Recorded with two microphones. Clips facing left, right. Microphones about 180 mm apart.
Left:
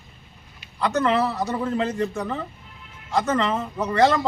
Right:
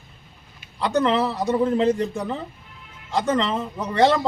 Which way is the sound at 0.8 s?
25° right (ahead or behind).